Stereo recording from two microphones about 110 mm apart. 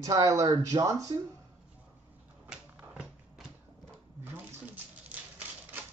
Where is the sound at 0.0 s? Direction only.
30° right (ahead or behind).